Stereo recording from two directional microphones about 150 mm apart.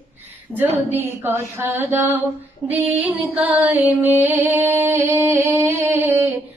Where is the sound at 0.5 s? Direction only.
15° right (ahead or behind).